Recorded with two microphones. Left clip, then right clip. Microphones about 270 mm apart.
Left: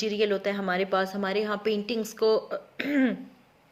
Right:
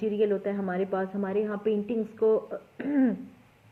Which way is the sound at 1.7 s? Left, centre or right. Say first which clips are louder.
Even; left.